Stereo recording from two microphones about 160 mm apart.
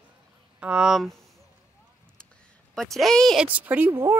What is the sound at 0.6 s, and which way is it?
Speech, 5° right (ahead or behind).